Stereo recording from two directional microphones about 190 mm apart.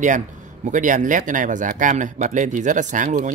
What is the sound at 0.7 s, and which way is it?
Speech, 40° right (ahead or behind).